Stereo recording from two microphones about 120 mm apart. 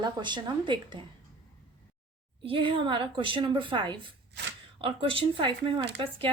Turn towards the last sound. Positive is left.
turn(degrees=-50)  # may be behind; listen again after turning